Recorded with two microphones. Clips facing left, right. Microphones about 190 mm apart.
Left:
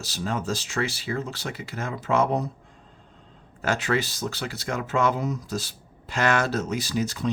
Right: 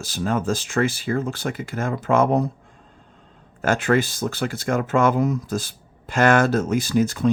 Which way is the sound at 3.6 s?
50° right (ahead or behind).